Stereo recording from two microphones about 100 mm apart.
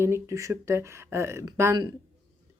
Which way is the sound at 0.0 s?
30° right (ahead or behind).